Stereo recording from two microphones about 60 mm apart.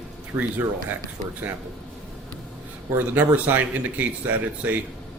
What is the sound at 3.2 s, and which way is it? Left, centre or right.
Speech, right.